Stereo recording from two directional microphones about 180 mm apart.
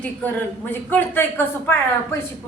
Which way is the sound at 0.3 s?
10° left (ahead or behind).